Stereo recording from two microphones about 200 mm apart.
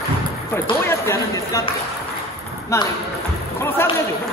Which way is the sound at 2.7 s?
15° left (ahead or behind).